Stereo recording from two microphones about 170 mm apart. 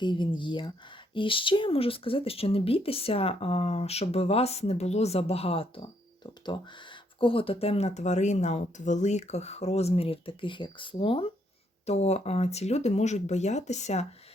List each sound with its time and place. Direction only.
0.0 s speech: 25° left (ahead or behind)